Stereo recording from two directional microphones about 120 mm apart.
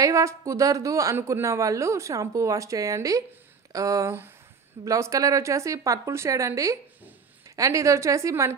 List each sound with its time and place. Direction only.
0.0 s a woman's voice: 25° right (ahead or behind)